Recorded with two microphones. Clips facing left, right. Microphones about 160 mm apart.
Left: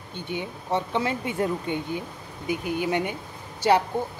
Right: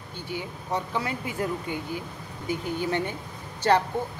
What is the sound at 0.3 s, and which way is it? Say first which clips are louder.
A woman's voice: left 3 dB; 25° left (ahead or behind).